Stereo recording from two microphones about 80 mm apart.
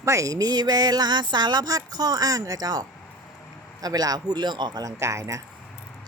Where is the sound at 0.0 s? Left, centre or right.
Right.